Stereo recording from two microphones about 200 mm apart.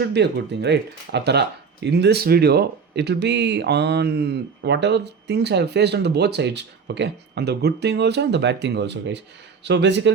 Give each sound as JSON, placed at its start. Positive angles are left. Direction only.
{"t": 0.1, "sound": "speech", "side_deg": -60}